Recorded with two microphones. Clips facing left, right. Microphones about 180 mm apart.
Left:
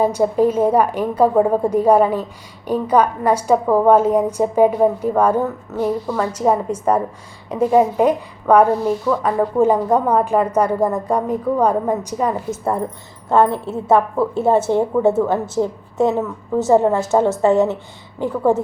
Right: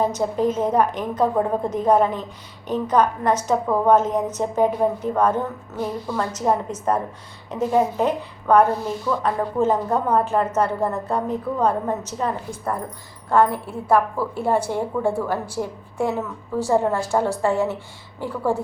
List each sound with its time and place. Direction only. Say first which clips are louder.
0.0 s a woman's voice: left 5 dB; 10° left (ahead or behind)
12.5 s a woman's voice: left 6 dB; 25° left (ahead or behind)